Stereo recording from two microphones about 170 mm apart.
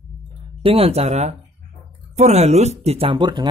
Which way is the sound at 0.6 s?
35° right (ahead or behind).